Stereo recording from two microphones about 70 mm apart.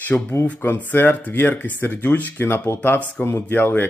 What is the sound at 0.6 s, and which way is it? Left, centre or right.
Speech, left.